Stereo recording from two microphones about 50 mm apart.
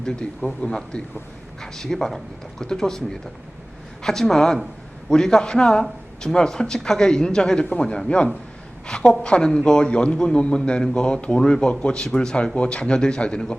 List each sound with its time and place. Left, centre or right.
0.0 s speech: centre